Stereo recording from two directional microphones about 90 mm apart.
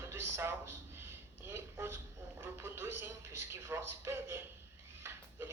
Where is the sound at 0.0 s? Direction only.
30° right (ahead or behind).